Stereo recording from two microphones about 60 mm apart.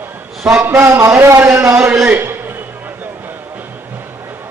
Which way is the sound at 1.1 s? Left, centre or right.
Right.